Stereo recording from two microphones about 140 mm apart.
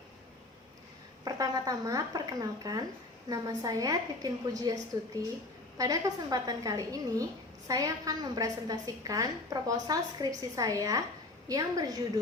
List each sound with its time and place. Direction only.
1.2 s a woman's voice: 25° right (ahead or behind)